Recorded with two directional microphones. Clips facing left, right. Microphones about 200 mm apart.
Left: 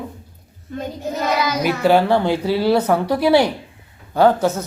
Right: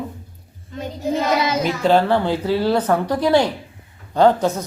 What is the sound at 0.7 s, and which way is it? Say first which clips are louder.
Speech: left 3 dB; 55° left (ahead or behind).